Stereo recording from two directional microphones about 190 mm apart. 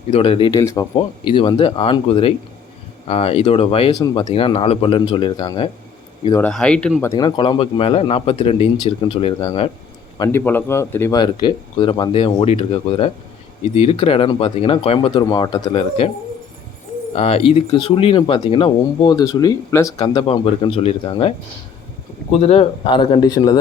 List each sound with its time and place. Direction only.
0.1 s speech: 30° left (ahead or behind)
0.6 s a man's voice: 15° left (ahead or behind)
0.9 s speech: 25° left (ahead or behind)
6.4 s speech: 5° left (ahead or behind)
7.1 s speech: 20° left (ahead or behind)
10.2 s a man's voice: 10° left (ahead or behind)
17.2 s speech: 30° left (ahead or behind)
20.0 s speech: 30° left (ahead or behind)